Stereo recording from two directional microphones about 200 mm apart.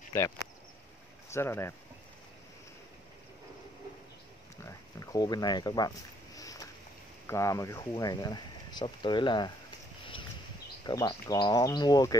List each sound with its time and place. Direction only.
1.3 s speech: 10° left (ahead or behind)
4.6 s speech: 15° left (ahead or behind)
10.9 s speech: 20° left (ahead or behind)